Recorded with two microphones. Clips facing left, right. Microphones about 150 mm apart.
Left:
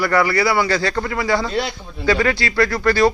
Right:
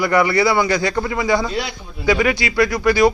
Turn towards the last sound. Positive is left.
turn(degrees=-15)  # may be behind; listen again after turning